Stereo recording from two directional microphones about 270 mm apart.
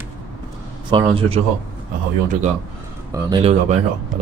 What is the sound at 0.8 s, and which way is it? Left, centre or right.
Speech, centre.